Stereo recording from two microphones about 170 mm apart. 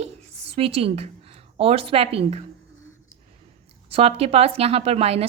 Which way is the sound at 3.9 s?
35° right (ahead or behind).